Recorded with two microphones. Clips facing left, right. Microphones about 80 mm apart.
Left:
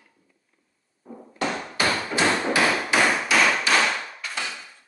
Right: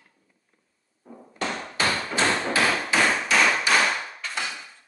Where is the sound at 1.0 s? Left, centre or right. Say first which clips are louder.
Left 3 dB; centre.